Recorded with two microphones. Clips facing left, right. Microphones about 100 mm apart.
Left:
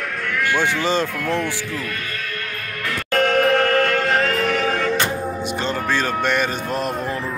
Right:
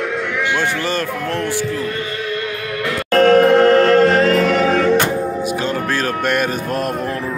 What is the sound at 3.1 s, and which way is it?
Music, 40° right (ahead or behind).